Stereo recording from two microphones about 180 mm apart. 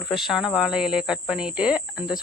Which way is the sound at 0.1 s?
Centre (ahead or behind).